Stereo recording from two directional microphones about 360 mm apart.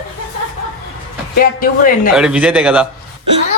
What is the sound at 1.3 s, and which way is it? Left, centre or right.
Speech, left.